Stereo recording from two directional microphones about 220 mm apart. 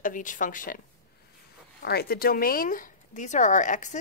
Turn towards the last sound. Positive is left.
turn(degrees=35)  # may be behind; listen again after turning